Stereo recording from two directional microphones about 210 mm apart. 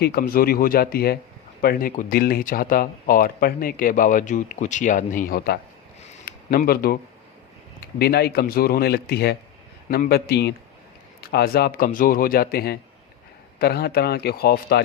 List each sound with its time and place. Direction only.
0.0 s a man's voice: 45° left (ahead or behind)
6.3 s a sound: 45° left (ahead or behind)
6.7 s a man's voice: 45° left (ahead or behind)